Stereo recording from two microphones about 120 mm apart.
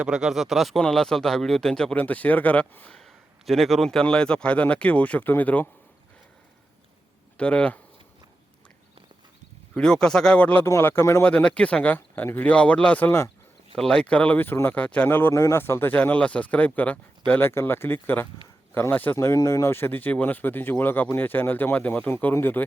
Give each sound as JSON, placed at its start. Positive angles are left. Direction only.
{"t": 0.0, "sound": "speech", "side_deg": -5}
{"t": 7.3, "sound": "speech", "side_deg": 10}
{"t": 9.7, "sound": "speech", "side_deg": 5}
{"t": 11.3, "sound": "speech", "side_deg": 10}
{"t": 13.7, "sound": "speech", "side_deg": 5}